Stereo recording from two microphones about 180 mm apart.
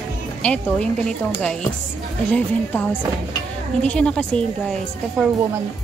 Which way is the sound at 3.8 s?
5° left (ahead or behind).